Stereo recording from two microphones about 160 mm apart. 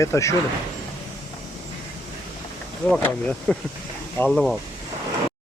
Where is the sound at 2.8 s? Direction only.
10° left (ahead or behind).